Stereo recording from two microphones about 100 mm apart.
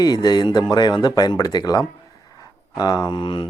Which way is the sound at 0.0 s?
45° left (ahead or behind).